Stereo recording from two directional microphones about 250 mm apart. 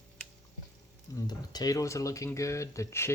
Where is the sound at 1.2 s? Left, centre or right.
Centre.